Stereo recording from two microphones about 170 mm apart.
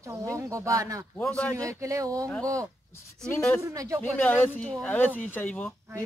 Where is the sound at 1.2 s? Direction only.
5° left (ahead or behind).